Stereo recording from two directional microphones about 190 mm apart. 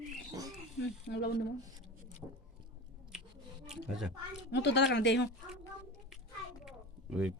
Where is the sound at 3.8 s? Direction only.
Centre (ahead or behind).